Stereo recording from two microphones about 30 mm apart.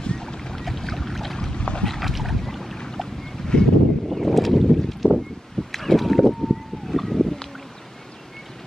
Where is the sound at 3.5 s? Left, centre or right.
Left.